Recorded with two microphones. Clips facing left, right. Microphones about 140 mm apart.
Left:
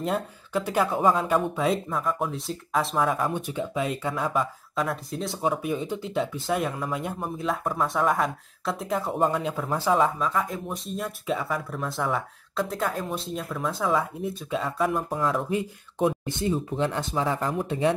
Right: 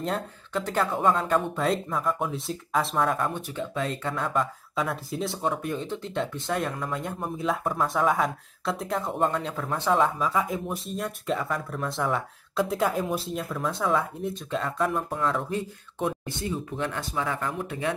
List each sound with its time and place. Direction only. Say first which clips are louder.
0.0 s speech: left 2 dB; 5° left (ahead or behind)
3.3 s speech: left 2 dB; 15° left (ahead or behind)
16.0 s speech: left 4 dB; 20° left (ahead or behind)